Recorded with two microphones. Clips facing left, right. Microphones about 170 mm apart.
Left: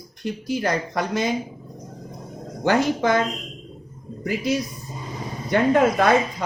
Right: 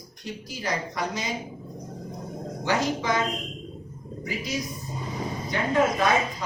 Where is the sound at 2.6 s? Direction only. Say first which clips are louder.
Left 6 dB; 55° left (ahead or behind).